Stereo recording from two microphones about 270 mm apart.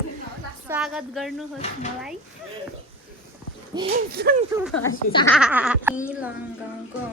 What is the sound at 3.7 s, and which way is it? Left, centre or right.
Speech, centre.